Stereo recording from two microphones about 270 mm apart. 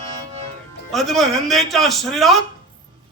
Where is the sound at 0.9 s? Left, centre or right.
Centre.